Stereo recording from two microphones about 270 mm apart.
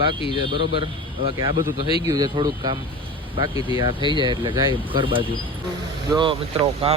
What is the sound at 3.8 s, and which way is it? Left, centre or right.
Speech, centre.